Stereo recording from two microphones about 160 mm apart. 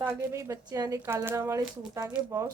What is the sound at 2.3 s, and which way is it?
Speech, 20° right (ahead or behind).